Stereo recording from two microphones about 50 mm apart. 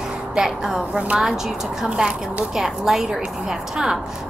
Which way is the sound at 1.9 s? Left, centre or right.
Centre.